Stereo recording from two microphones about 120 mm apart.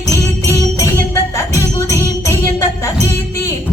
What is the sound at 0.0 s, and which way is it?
Music, 25° left (ahead or behind).